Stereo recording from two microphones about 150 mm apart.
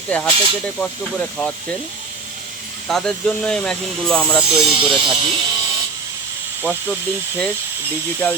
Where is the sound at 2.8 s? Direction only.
5° left (ahead or behind).